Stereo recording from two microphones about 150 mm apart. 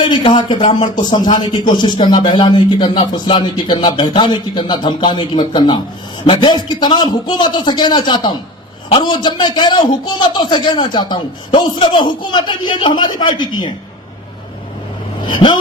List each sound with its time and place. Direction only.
0.0 s a man's voice: 30° left (ahead or behind)
15.2 s speech: 30° left (ahead or behind)